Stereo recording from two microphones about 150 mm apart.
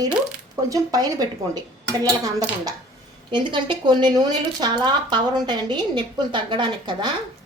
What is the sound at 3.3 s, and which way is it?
Speech, 30° right (ahead or behind).